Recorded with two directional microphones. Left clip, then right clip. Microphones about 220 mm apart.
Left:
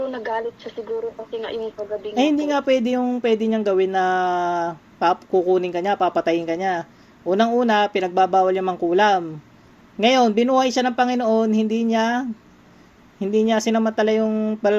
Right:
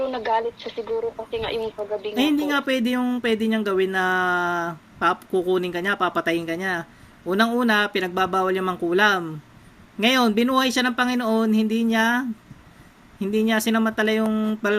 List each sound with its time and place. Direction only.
0.0 s speech: centre (ahead or behind)
2.1 s speech: 30° right (ahead or behind)